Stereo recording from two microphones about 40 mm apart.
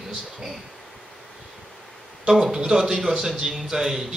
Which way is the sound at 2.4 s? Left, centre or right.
Centre.